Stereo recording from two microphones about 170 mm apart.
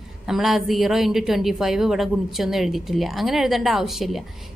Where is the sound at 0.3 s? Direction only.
Centre (ahead or behind).